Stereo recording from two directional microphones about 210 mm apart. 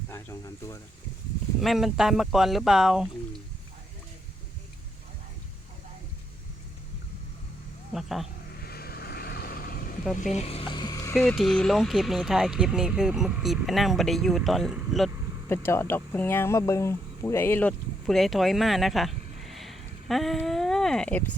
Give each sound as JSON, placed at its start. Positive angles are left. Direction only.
{"t": 0.1, "sound": "speech", "side_deg": 10}
{"t": 1.6, "sound": "speech", "side_deg": 0}
{"t": 7.9, "sound": "speech", "side_deg": 0}
{"t": 8.6, "sound": "vehicle", "side_deg": 45}
{"t": 10.3, "sound": "music", "side_deg": 30}
{"t": 11.1, "sound": "speech", "side_deg": 5}
{"t": 15.4, "sound": "speech", "side_deg": 10}